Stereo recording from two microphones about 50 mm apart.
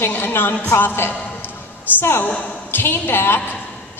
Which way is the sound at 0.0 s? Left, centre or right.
Left.